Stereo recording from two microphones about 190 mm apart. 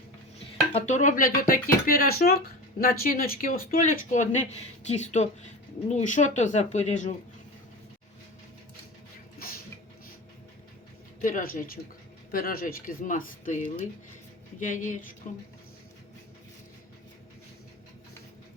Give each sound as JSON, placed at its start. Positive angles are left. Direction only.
{"t": 0.7, "sound": "speech", "side_deg": 35}
{"t": 11.2, "sound": "speech", "side_deg": 45}
{"t": 14.6, "sound": "speech", "side_deg": 40}